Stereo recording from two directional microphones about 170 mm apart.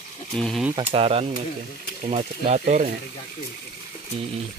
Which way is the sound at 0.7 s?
35° right (ahead or behind).